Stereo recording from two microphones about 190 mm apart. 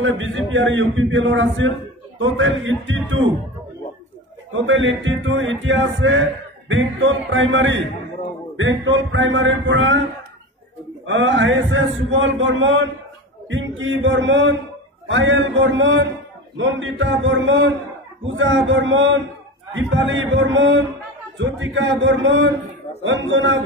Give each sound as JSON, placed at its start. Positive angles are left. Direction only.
{"t": 0.0, "sound": "a man's voice", "side_deg": -80}
{"t": 4.5, "sound": "speech", "side_deg": -90}
{"t": 8.5, "sound": "a man's voice", "side_deg": -80}
{"t": 11.1, "sound": "a man's voice", "side_deg": -80}